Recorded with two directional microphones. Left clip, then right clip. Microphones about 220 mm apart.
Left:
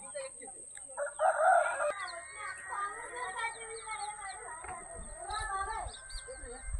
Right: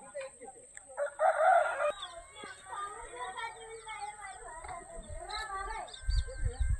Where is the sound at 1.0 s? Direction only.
35° right (ahead or behind).